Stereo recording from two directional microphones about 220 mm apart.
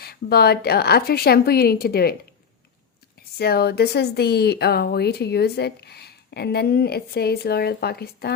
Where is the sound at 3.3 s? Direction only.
45° left (ahead or behind).